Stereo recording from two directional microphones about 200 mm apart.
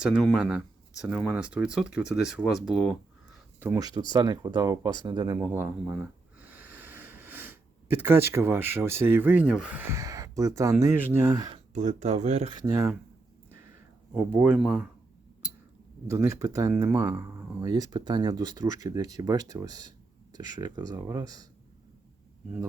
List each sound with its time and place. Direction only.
0.0 s speech: centre (ahead or behind)
3.6 s speech: 15° right (ahead or behind)
11.7 s speech: 35° right (ahead or behind)
12.7 s speech: 15° right (ahead or behind)
14.3 s speech: 10° right (ahead or behind)
16.0 s speech: 15° right (ahead or behind)